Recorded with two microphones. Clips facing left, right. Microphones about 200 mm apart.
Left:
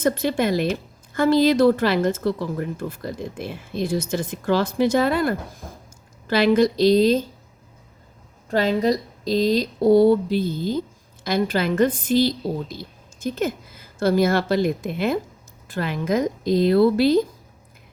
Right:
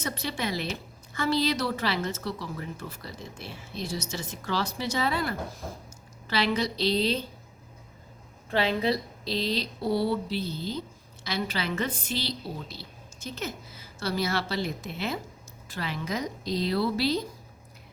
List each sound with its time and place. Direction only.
0.0 s speech: 50° left (ahead or behind)
8.4 s speech: 40° left (ahead or behind)